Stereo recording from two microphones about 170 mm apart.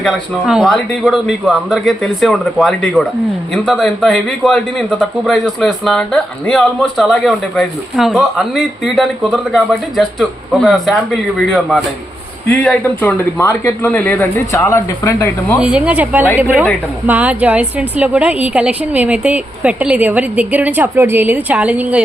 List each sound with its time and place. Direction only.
0.0 s a man's voice: centre (ahead or behind); by 15.5 s 15° left (ahead or behind)
15.5 s a woman's voice: 5° right (ahead or behind)